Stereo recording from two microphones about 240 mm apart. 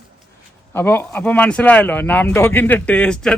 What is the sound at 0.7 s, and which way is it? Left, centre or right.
Speech, centre.